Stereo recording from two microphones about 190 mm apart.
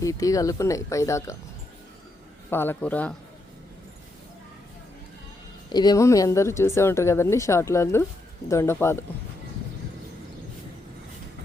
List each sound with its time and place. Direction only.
0.0 s speech: 15° left (ahead or behind)
2.5 s speech: 10° left (ahead or behind)
5.6 s speech: 20° left (ahead or behind)